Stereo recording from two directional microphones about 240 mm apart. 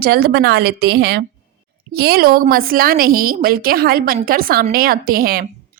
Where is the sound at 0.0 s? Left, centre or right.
Right.